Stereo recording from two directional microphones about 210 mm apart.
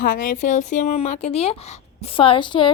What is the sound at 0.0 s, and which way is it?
A woman's voice, 40° left (ahead or behind).